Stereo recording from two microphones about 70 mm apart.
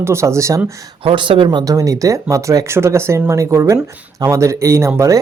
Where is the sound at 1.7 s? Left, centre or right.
Right.